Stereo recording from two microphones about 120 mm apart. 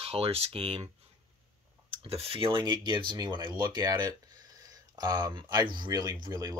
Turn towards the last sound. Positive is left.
turn(degrees=-35)  # may be behind; listen again after turning